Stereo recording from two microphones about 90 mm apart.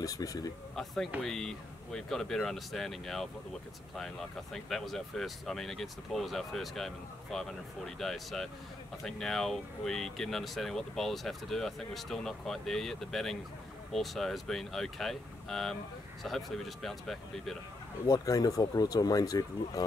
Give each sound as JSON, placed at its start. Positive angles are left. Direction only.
{"t": 0.0, "sound": "speech", "side_deg": 40}
{"t": 1.2, "sound": "speech", "side_deg": 5}
{"t": 18.0, "sound": "speech", "side_deg": 40}